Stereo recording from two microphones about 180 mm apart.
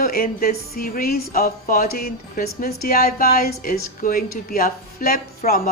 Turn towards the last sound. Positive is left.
turn(degrees=55)  # may be behind; listen again after turning